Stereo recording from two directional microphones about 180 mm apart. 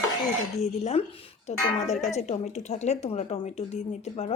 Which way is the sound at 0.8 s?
35° left (ahead or behind).